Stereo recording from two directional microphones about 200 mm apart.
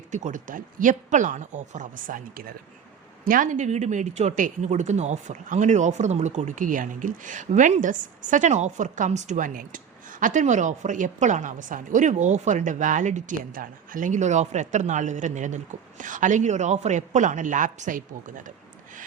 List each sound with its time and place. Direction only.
0.1 s speech: 40° right (ahead or behind)